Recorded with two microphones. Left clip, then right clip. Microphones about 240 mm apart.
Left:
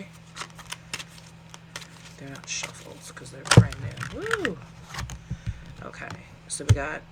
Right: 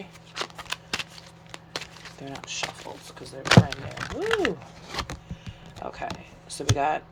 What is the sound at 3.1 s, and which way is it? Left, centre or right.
Speech, right.